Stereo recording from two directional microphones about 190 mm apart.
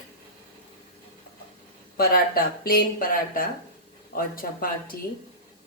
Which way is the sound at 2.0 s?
50° left (ahead or behind).